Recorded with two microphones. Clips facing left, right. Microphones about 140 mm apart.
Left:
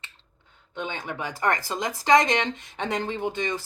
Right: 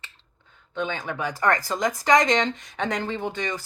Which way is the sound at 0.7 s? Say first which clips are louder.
Right 3 dB; 20° left (ahead or behind).